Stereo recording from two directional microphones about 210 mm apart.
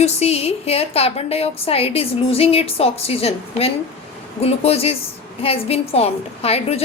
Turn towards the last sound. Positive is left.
turn(degrees=30)  # may be behind; listen again after turning